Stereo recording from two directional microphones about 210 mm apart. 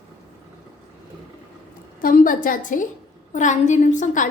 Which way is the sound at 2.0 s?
40° left (ahead or behind).